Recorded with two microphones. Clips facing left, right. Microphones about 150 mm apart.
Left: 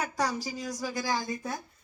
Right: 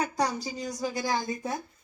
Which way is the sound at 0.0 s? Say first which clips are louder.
Right 2 dB; 25° right (ahead or behind).